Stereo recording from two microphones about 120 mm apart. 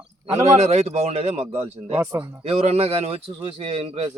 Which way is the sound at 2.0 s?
15° right (ahead or behind).